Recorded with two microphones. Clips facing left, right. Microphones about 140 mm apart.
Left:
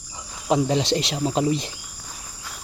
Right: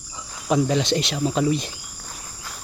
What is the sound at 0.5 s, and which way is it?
Speech, 25° left (ahead or behind).